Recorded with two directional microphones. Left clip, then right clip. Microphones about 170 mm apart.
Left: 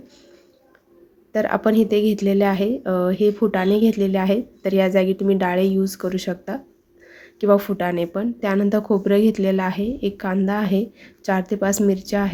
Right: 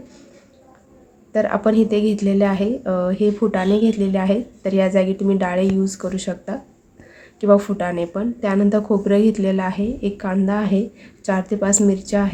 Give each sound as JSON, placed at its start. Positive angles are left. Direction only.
{"t": 1.3, "sound": "a woman's voice", "side_deg": 25}